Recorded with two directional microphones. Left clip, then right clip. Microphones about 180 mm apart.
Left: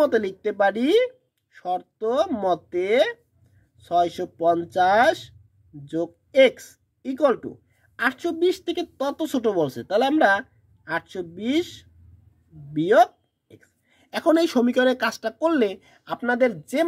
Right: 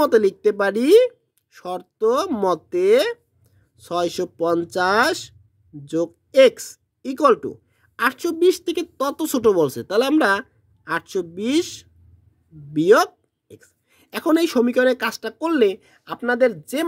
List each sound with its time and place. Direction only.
0.0 s a woman's voice: 55° right (ahead or behind); by 16.8 s 30° right (ahead or behind)